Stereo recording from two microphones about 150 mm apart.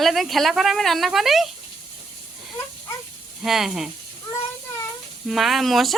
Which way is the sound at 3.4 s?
5° right (ahead or behind).